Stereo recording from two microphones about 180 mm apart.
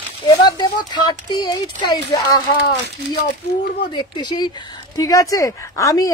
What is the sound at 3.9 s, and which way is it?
Speech, 25° left (ahead or behind).